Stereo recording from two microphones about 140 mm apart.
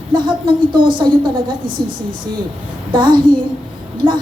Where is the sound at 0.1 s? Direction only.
35° right (ahead or behind).